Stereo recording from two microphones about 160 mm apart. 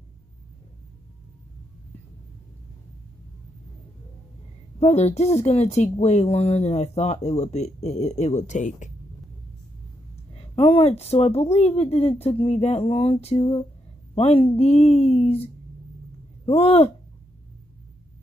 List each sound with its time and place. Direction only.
4.7 s speech: 40° left (ahead or behind)
10.3 s speech: 35° left (ahead or behind)
16.4 s speech: 40° left (ahead or behind)